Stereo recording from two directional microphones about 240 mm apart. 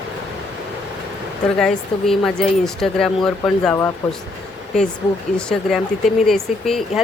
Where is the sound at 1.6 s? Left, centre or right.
Centre.